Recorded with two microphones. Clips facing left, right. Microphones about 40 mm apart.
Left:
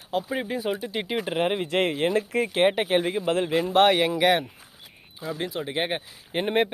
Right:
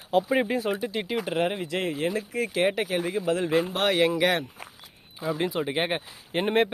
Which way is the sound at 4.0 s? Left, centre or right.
Centre.